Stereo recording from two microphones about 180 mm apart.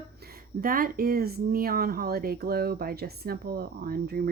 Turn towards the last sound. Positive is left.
turn(degrees=-60)  # may be behind; listen again after turning